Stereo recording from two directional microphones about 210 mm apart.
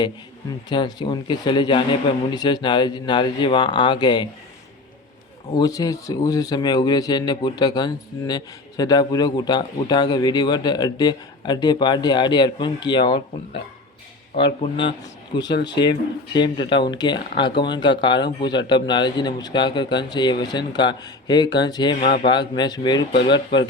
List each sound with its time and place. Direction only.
0.7 s speech: 20° left (ahead or behind)
5.5 s speech: 20° left (ahead or behind)